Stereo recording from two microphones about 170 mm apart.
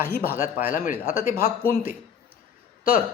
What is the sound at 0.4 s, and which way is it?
Speech, 55° left (ahead or behind).